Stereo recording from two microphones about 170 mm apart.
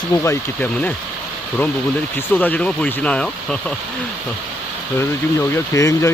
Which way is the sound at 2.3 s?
10° left (ahead or behind).